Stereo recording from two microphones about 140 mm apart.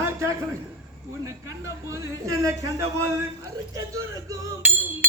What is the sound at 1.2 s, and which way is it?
Speech, 20° right (ahead or behind).